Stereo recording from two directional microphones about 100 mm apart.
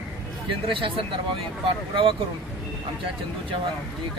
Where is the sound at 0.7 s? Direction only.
60° right (ahead or behind).